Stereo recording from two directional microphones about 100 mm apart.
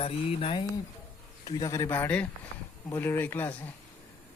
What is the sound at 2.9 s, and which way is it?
Speech, 20° left (ahead or behind).